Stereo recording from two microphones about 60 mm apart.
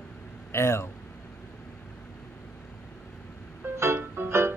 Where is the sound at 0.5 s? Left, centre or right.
Left.